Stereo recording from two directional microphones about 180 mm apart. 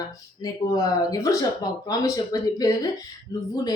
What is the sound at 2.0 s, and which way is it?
Speech, 20° left (ahead or behind).